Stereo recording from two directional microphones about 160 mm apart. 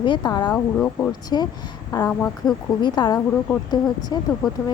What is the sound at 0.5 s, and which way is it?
Speech, 5° left (ahead or behind).